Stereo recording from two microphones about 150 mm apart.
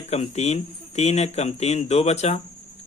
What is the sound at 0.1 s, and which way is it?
Speech, 45° left (ahead or behind).